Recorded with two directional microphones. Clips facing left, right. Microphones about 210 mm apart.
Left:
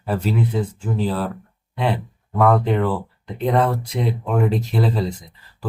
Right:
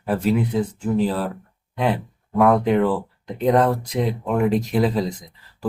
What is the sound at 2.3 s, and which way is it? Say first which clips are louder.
Speech: right 1 dB; centre (ahead or behind).